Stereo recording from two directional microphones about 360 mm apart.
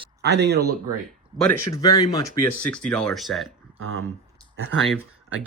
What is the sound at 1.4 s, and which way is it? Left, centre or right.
Speech, centre.